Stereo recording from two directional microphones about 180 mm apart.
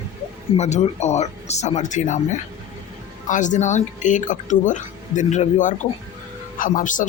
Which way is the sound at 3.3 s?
45° left (ahead or behind).